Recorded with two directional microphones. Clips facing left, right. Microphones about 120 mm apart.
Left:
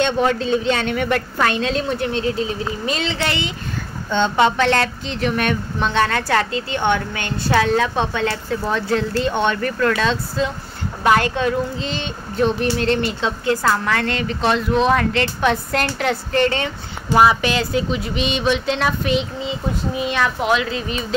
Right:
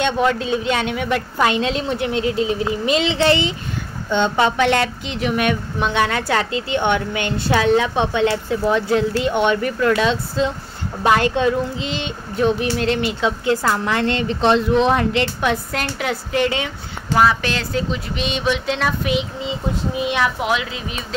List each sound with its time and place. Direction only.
0.0 s speech: 5° right (ahead or behind)
1.4 s a woman's voice: 20° right (ahead or behind)
4.1 s speech: 15° right (ahead or behind)
13.5 s a woman's voice: 20° right (ahead or behind)
15.4 s speech: 5° right (ahead or behind)
17.1 s speech: 15° left (ahead or behind)
20.0 s speech: 15° right (ahead or behind)